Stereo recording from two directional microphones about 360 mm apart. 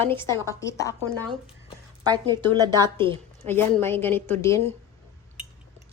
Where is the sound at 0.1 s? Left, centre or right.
Centre.